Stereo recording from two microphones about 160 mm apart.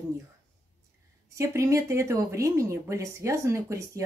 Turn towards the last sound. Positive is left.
turn(degrees=-20)  # may be behind; listen again after turning